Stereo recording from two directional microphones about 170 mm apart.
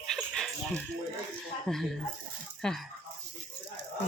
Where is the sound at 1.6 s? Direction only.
Centre (ahead or behind).